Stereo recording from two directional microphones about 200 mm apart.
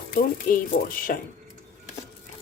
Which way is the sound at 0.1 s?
45° left (ahead or behind).